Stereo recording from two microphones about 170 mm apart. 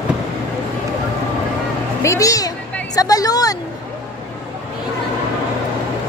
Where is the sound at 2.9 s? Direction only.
20° left (ahead or behind).